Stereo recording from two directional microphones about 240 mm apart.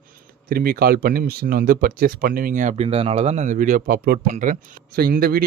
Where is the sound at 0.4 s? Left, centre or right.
Right.